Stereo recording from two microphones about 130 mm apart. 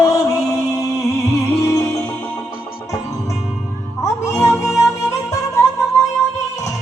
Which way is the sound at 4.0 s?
20° left (ahead or behind).